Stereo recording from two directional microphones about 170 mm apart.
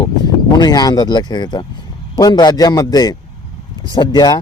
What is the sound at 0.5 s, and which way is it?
Speech, 25° left (ahead or behind).